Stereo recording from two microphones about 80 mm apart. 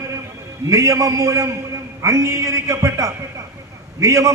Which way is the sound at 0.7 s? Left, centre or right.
Right.